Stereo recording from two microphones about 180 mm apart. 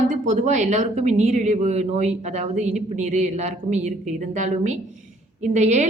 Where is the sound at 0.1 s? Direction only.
45° right (ahead or behind).